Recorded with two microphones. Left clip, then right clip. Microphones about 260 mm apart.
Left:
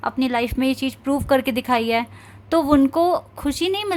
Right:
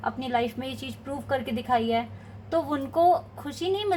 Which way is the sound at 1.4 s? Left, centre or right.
Left.